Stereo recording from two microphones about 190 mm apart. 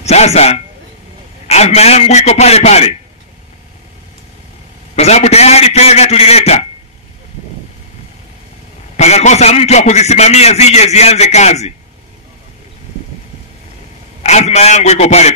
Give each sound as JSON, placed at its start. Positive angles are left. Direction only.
{"t": 0.0, "sound": "a man's voice", "side_deg": 35}
{"t": 4.9, "sound": "a man's voice", "side_deg": 35}
{"t": 8.9, "sound": "a man's voice", "side_deg": 35}
{"t": 14.2, "sound": "a man's voice", "side_deg": 35}